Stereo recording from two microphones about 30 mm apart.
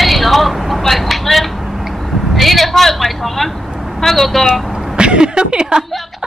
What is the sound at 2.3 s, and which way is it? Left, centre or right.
A man's voice, centre.